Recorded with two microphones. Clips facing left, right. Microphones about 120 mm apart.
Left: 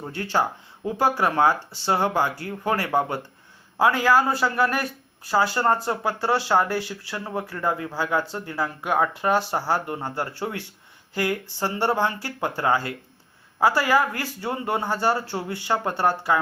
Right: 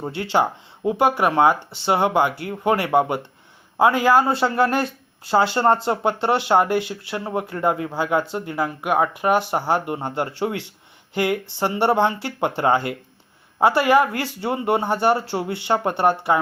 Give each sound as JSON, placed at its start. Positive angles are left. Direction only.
{"t": 0.2, "sound": "speech", "side_deg": -25}